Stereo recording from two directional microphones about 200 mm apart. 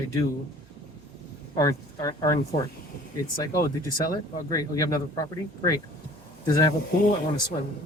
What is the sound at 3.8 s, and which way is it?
Speech, 20° left (ahead or behind).